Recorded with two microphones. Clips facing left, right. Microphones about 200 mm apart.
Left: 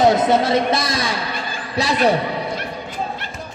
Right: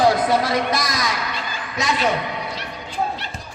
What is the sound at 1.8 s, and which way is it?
Speech, 35° left (ahead or behind).